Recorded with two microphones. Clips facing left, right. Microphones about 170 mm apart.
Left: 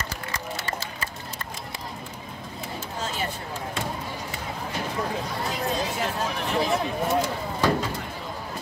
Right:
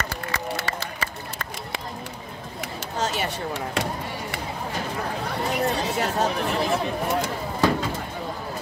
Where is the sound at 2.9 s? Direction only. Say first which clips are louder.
Right 5 dB; 80° right.